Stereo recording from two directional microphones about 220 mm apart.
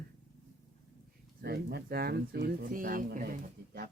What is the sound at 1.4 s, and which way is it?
Speech, 45° right (ahead or behind).